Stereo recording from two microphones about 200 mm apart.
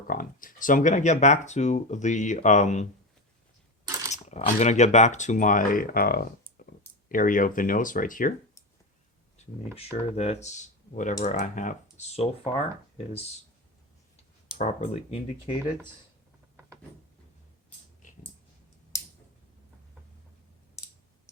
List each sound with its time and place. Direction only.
0.1 s speech: 45° left (ahead or behind)
3.8 s mechanisms: 15° right (ahead or behind)
4.1 s speech: 35° left (ahead or behind)
10.2 s speech: 35° left (ahead or behind)
14.6 s speech: 35° left (ahead or behind)
18.9 s a sound: 15° left (ahead or behind)